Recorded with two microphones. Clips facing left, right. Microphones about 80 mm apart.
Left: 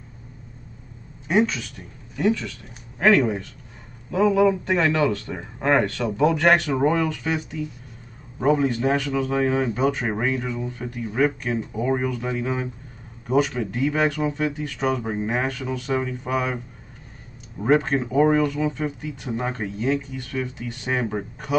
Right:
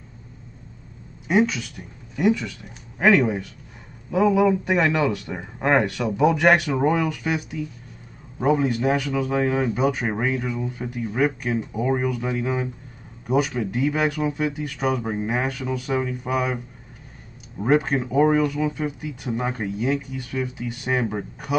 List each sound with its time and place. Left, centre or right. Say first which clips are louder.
1.2 s speech: right 1 dB; centre
3.1 s a man's voice: even; centre